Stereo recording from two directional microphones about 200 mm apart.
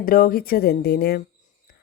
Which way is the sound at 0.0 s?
45° left (ahead or behind).